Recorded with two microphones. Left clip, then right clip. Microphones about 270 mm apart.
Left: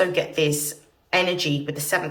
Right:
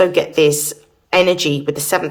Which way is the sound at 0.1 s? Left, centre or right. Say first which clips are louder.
Right 9 dB; centre.